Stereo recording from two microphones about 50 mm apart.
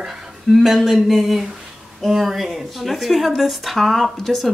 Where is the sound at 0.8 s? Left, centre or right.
Centre.